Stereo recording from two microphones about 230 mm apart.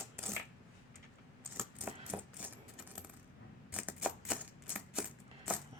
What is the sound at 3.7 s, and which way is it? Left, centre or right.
Typewriter, centre.